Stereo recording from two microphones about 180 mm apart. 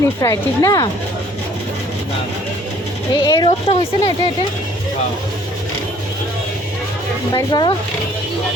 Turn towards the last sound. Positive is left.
turn(degrees=25)  # may be behind; listen again after turning